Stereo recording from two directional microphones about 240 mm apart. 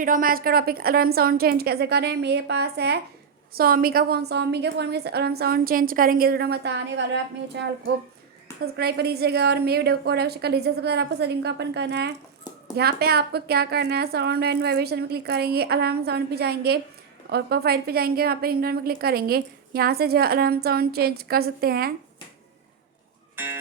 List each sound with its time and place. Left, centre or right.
0.0 s a woman's voice: right
8.6 s a woman's voice: right
23.3 s music: centre